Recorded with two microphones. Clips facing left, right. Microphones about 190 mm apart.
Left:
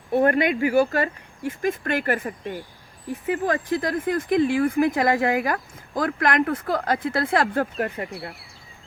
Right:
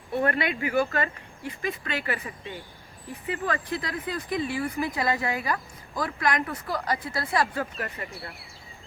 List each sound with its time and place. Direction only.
0.1 s speech: 45° left (ahead or behind)
3.4 s speech: 45° left (ahead or behind)